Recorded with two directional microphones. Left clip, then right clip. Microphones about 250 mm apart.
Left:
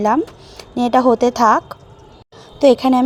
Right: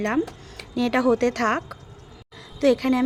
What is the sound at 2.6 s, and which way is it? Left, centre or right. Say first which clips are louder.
Speech: left 8 dB; centre.